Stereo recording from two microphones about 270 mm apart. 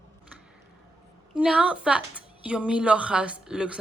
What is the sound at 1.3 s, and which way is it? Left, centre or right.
A woman's voice, centre.